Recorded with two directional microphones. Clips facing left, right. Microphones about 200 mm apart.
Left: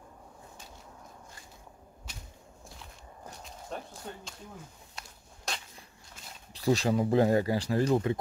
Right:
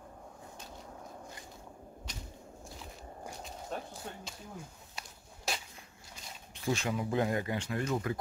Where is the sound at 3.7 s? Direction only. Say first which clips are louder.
Even; centre (ahead or behind).